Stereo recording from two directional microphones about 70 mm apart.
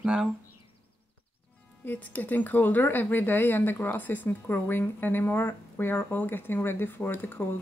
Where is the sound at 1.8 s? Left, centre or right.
Left.